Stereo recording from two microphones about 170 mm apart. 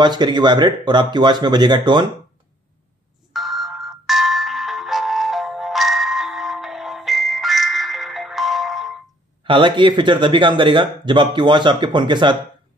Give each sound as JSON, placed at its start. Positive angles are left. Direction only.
{"t": 0.0, "sound": "a man's voice", "side_deg": -25}
{"t": 3.3, "sound": "ringtone", "side_deg": 0}
{"t": 9.4, "sound": "a man's voice", "side_deg": -30}